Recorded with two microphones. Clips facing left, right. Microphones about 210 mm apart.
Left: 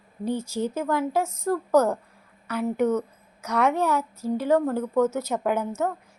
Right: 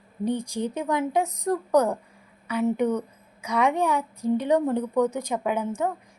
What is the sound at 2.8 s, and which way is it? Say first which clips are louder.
A woman's voice: left 1 dB; 15° right (ahead or behind).